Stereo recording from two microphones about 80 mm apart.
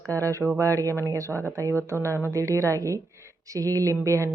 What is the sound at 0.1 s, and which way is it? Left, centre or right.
A woman's voice, right.